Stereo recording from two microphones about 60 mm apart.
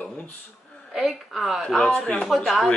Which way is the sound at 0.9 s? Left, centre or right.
Centre.